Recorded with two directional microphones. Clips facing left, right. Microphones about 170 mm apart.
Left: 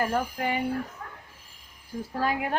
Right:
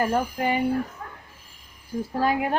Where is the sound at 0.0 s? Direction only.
25° right (ahead or behind).